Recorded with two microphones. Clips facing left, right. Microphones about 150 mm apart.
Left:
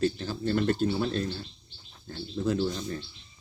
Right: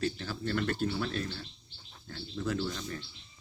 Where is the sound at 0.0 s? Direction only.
30° left (ahead or behind).